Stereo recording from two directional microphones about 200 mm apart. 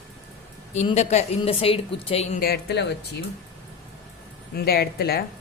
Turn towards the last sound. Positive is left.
turn(degrees=50)  # may be behind; listen again after turning